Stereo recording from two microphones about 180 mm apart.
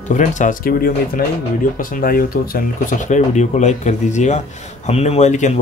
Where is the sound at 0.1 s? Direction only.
45° left (ahead or behind).